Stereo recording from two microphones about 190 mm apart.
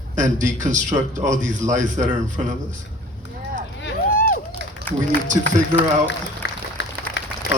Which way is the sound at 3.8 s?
70° left (ahead or behind).